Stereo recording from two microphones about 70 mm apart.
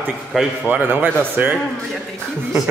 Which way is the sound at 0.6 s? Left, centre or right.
Right.